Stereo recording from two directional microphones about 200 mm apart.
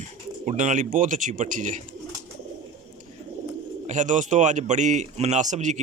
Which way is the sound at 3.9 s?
40° right (ahead or behind).